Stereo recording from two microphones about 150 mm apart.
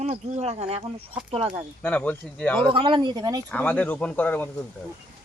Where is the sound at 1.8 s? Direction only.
10° left (ahead or behind).